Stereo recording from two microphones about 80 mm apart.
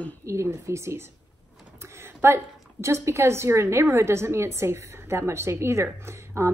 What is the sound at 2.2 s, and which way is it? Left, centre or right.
A woman's voice, right.